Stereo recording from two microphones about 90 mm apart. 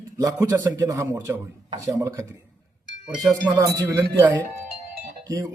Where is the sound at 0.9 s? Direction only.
35° right (ahead or behind).